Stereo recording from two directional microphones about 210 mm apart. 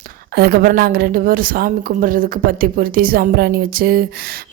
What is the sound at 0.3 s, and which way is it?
A woman's voice, 50° right (ahead or behind).